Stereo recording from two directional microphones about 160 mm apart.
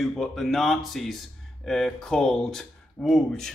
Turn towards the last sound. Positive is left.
turn(degrees=0)  # may be behind; listen again after turning